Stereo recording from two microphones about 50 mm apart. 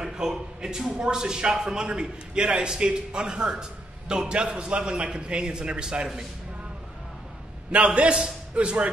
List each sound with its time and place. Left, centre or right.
0.0 s a man's voice: centre
1.9 s a man's voice: right
7.7 s a man's voice: right